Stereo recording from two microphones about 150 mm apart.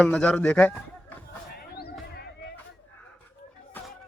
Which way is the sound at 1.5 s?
90° left.